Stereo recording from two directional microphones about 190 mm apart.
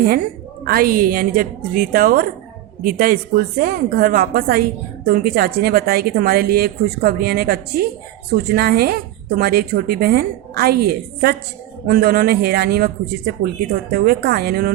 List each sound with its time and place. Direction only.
0.6 s a woman's voice: 50° right (ahead or behind)